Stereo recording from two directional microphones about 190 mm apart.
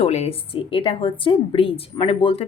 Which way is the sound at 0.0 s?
35° left (ahead or behind).